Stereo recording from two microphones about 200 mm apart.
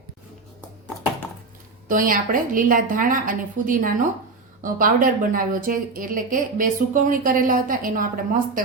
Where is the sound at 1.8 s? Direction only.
45° right (ahead or behind).